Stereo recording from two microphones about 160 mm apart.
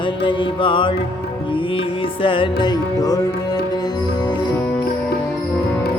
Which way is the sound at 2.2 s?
30° left (ahead or behind).